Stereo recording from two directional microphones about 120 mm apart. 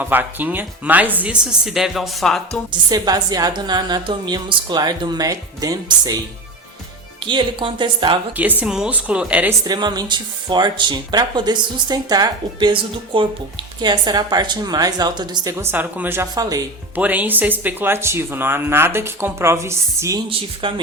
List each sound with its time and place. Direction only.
0.0 s speech: 15° right (ahead or behind); by 2.6 s 5° left (ahead or behind)
2.9 s speech: 35° right (ahead or behind)
7.3 s speech: 40° right (ahead or behind)
8.4 s speech: 10° right (ahead or behind)
9.6 s speech: 35° right (ahead or behind)
15.5 s speech: 20° right (ahead or behind)
16.3 s speech: 30° right (ahead or behind)
16.9 s speech: 10° right (ahead or behind)
20.3 s speech: 45° right (ahead or behind)